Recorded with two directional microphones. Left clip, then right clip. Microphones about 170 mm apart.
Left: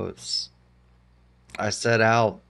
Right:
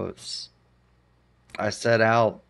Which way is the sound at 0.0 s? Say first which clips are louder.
Left 3 dB; 5° right (ahead or behind).